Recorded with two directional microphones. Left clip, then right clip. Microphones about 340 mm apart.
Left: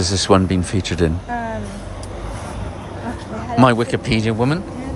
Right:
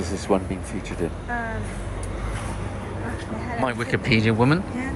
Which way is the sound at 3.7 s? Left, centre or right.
Centre.